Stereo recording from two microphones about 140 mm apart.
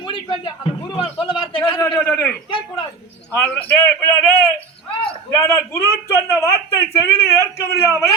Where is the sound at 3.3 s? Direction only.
15° left (ahead or behind).